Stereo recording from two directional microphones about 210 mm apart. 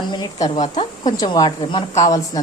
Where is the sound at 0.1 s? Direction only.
20° left (ahead or behind).